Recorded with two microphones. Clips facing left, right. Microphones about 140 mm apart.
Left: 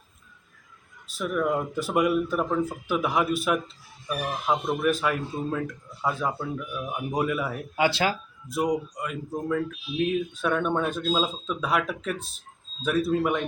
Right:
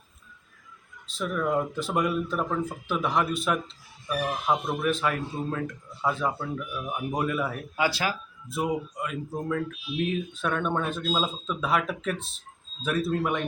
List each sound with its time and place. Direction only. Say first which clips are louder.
1.3 s speech: left 1 dB; 5° left (ahead or behind)
7.8 s speech: left 3 dB; 25° left (ahead or behind)
8.4 s speech: left 3 dB; centre (ahead or behind)